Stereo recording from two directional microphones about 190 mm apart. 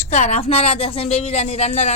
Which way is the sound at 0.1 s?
35° left (ahead or behind).